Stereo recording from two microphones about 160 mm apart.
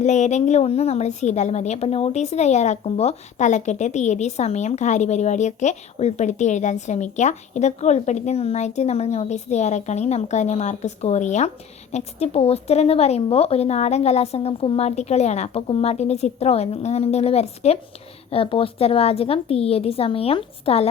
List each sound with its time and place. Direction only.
0.0 s a woman's voice: 45° left (ahead or behind)